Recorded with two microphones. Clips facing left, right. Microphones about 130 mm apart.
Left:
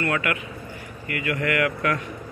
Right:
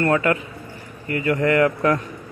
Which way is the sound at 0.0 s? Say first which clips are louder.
Right 6 dB; 35° right (ahead or behind).